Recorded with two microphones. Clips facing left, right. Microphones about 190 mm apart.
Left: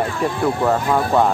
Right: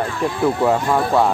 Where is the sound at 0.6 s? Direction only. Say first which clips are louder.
Even; 5° right (ahead or behind).